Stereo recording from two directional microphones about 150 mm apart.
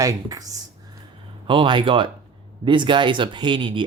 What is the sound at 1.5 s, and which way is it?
Speech, 35° right (ahead or behind).